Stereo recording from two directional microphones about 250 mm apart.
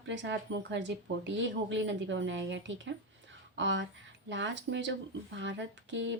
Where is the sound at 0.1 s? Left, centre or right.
Right.